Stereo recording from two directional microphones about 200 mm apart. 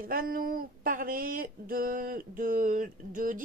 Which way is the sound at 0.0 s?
45° right (ahead or behind).